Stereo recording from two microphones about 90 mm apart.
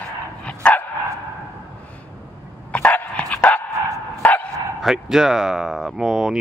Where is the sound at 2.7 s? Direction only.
15° left (ahead or behind).